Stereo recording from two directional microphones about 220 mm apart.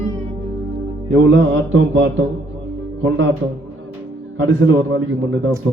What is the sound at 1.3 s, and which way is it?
Mantra, 65° right (ahead or behind).